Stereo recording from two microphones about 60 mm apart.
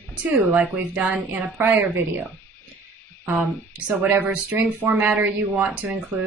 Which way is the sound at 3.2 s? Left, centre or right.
Right.